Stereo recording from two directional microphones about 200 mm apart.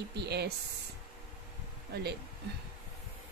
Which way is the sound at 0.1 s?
55° right (ahead or behind).